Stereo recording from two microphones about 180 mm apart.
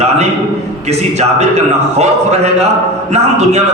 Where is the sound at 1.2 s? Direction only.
35° right (ahead or behind).